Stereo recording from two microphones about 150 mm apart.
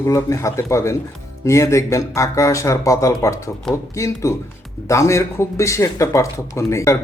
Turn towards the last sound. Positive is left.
turn(degrees=20)  # may be behind; listen again after turning